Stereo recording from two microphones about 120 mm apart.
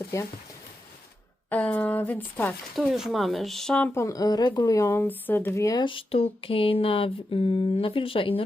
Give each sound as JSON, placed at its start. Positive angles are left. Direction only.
{"t": 1.5, "sound": "speech", "side_deg": 10}
{"t": 2.7, "sound": "speech", "side_deg": 0}
{"t": 3.9, "sound": "speech", "side_deg": 25}
{"t": 5.8, "sound": "a sound", "side_deg": 45}